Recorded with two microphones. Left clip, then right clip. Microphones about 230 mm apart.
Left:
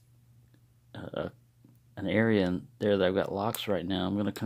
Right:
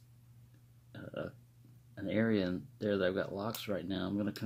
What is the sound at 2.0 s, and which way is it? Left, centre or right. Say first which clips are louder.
Speech: left 6 dB; left.